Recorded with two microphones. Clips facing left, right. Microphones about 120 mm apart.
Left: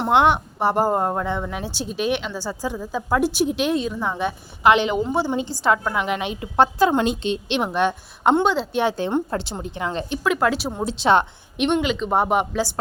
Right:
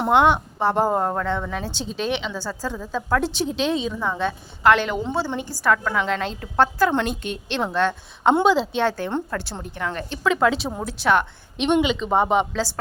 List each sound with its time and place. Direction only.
0.0 s speech: centre (ahead or behind); by 8.3 s 15° left (ahead or behind)
8.4 s speech: centre (ahead or behind)
8.8 s speech: 20° left (ahead or behind)
10.2 s speech: 5° left (ahead or behind)
10.8 s speech: 25° left (ahead or behind)
11.7 s speech: centre (ahead or behind)